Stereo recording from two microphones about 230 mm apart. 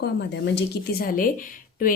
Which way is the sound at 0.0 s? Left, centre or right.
Left.